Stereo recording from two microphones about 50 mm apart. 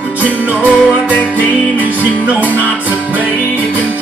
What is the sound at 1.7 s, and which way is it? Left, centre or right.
Music, right.